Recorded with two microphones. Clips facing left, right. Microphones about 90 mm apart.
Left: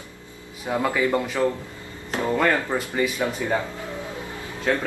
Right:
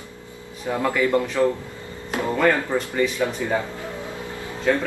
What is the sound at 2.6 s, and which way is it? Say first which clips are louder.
Speech: right 2 dB; 10° left (ahead or behind).